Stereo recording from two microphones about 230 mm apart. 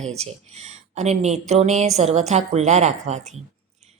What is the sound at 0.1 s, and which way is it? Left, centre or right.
A woman's voice, right.